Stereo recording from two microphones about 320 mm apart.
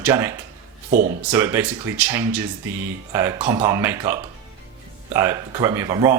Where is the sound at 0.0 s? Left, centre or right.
Centre.